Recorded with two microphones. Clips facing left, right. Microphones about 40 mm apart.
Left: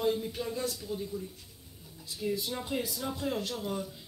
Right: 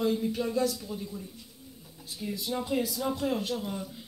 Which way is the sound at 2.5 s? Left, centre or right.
Centre.